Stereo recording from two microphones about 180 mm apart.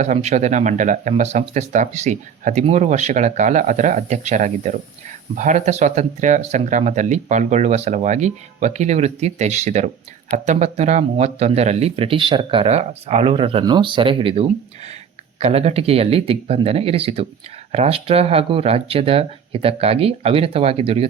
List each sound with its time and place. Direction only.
0.0 s speech: 40° right (ahead or behind)